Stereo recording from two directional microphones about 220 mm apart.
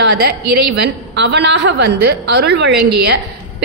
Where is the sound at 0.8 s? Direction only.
55° right (ahead or behind).